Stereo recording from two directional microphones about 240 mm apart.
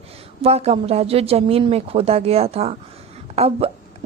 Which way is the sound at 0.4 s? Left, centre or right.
Right.